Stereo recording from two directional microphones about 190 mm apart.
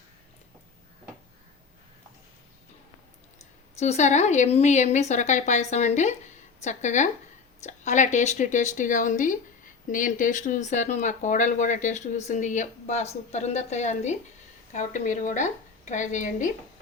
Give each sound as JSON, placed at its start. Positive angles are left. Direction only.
{"t": 3.8, "sound": "speech", "side_deg": 35}